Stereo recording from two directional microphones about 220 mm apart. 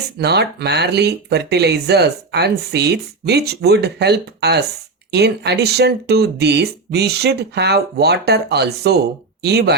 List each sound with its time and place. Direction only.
0.2 s speech: 50° right (ahead or behind)